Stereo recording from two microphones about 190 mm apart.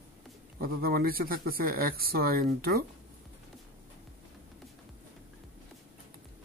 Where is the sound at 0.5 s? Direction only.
50° right (ahead or behind).